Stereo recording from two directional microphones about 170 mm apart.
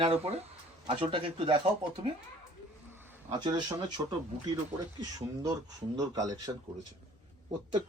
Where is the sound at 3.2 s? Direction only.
25° right (ahead or behind).